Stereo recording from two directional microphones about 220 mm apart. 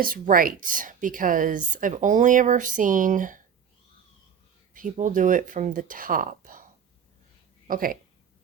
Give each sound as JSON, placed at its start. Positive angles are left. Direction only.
{"t": 0.0, "sound": "a woman's voice", "side_deg": -40}
{"t": 4.7, "sound": "a woman's voice", "side_deg": -35}
{"t": 7.7, "sound": "a woman's voice", "side_deg": -40}